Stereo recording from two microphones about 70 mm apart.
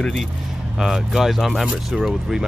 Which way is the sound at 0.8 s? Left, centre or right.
Centre.